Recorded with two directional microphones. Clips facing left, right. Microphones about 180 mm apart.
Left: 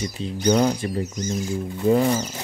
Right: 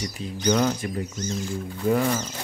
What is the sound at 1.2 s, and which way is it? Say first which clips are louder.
Speech: left 3 dB; 15° left (ahead or behind).